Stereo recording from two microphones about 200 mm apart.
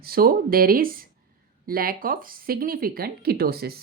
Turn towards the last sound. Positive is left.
turn(degrees=-50)  # may be behind; listen again after turning